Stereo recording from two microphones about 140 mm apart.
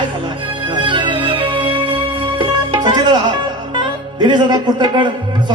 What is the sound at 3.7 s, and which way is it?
Speech, 35° right (ahead or behind).